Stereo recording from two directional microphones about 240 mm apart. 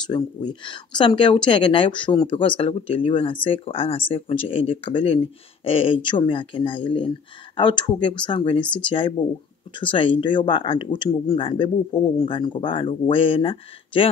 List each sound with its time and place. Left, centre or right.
0.0 s speech: centre